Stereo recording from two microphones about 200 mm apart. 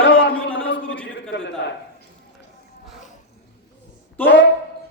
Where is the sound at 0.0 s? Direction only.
70° left (ahead or behind).